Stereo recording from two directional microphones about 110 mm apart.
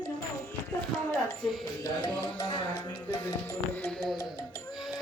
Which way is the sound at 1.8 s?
40° left (ahead or behind).